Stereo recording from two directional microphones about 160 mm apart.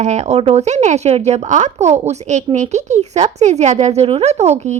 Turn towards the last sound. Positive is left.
turn(degrees=-45)  # may be behind; listen again after turning